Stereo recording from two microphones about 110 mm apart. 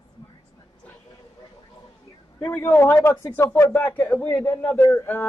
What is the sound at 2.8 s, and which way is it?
Speech, 20° left (ahead or behind).